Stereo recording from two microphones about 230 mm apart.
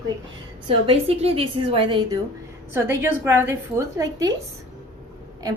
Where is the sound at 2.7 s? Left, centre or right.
Centre.